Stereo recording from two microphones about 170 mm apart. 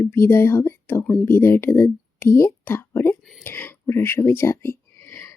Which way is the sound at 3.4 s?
10° left (ahead or behind).